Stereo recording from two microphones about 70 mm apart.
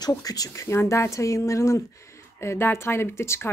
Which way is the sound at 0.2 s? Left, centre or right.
Left.